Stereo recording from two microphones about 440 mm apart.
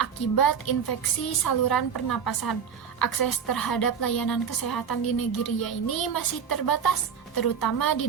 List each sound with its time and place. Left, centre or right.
0.0 s a woman's voice: left